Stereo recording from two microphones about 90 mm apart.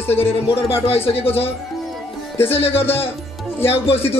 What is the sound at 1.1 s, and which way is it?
Speech, 90° left.